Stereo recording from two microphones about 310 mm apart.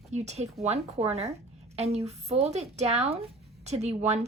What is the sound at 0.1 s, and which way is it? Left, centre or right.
Speech, right.